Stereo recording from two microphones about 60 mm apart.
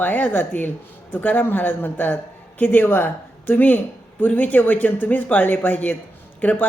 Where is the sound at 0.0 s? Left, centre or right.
Left.